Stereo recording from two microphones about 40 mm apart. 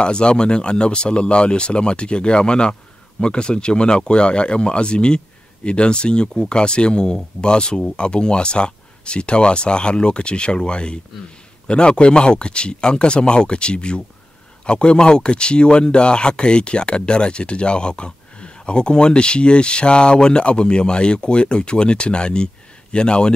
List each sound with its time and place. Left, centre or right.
0.0 s speech: left